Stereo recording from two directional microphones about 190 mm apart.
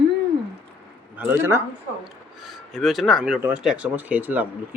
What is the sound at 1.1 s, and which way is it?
Speech, 10° right (ahead or behind).